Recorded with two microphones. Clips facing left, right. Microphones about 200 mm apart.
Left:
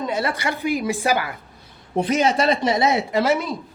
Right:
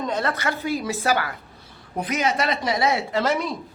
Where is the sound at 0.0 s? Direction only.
10° left (ahead or behind).